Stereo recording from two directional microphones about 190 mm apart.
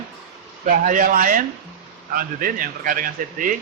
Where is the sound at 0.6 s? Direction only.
45° right (ahead or behind).